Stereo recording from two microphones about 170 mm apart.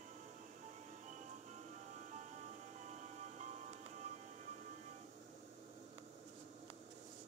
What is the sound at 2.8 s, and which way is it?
Music, 45° right (ahead or behind).